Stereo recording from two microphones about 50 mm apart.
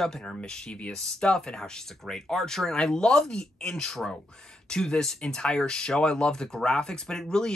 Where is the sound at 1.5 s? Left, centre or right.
Centre.